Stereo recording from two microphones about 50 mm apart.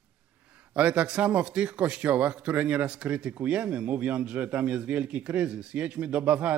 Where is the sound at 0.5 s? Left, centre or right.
Right.